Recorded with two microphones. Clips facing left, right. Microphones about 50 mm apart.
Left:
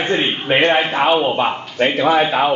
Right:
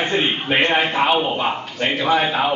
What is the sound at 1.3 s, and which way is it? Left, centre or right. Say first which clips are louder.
Speech: left 4 dB; left.